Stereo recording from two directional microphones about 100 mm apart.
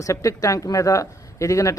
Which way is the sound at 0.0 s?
35° left (ahead or behind).